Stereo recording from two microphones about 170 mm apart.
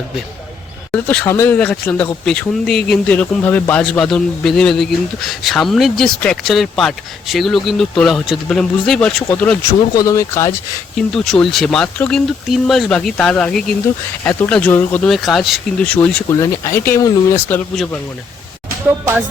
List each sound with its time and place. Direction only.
0.9 s speech: 5° left (ahead or behind)
10.9 s speech: 5° left (ahead or behind)
16.3 s speech: 15° left (ahead or behind)